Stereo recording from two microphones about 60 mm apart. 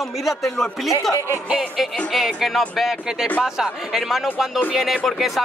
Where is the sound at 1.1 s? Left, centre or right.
Right.